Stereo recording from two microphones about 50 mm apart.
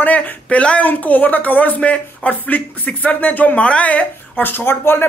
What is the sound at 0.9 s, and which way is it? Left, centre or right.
Speech, left.